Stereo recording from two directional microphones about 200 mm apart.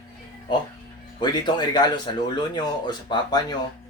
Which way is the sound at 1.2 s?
20° left (ahead or behind).